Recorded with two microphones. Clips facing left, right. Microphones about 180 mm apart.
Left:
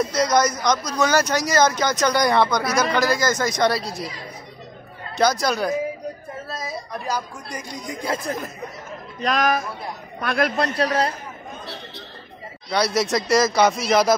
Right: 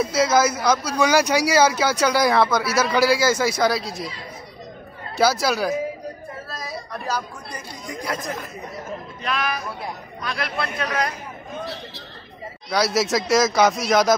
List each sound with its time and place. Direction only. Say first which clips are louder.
0.0 s speech: right 1 dB; 5° right (ahead or behind)
5.1 s a man's voice: even; 5° right (ahead or behind)
6.5 s a woman's voice: left 3 dB; 20° left (ahead or behind)
8.0 s speech: left 2 dB; 25° left (ahead or behind)
9.2 s speech: left 6 dB; 40° left (ahead or behind)
12.6 s a man's voice: even; centre (ahead or behind)